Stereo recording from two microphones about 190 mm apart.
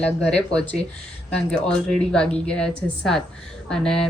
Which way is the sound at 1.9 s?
5° left (ahead or behind).